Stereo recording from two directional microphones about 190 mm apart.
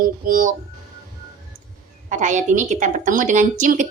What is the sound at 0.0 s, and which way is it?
Female singing, 45° right (ahead or behind).